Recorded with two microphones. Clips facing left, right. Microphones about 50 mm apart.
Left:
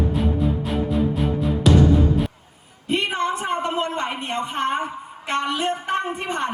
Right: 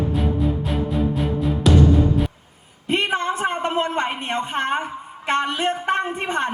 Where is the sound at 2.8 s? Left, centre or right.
Right.